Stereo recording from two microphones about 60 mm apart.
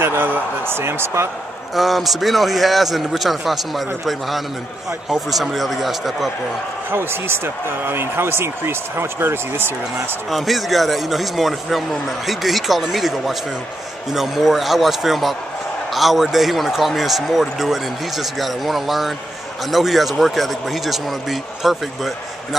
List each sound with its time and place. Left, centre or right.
0.0 s speech: right
1.8 s speech: centre
6.9 s speech: right
10.3 s speech: centre